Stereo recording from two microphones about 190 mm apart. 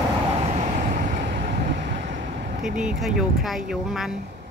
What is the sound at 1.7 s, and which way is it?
Vehicle, 65° right (ahead or behind).